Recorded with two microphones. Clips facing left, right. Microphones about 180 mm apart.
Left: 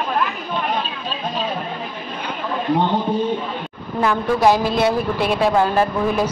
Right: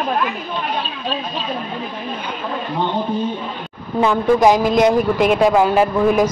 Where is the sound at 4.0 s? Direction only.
20° right (ahead or behind).